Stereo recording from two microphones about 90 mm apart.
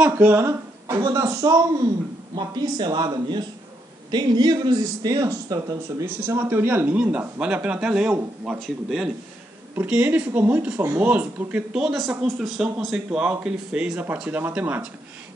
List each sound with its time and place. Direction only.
0.0 s speech: 20° right (ahead or behind)
0.5 s speech: 35° right (ahead or behind)
2.3 s a man's voice: 55° right (ahead or behind)
6.0 s speech: 25° right (ahead or behind); by 9.1 s 5° right (ahead or behind)
9.8 s speech: 15° right (ahead or behind)
11.8 s speech: centre (ahead or behind); by 14.8 s 20° right (ahead or behind)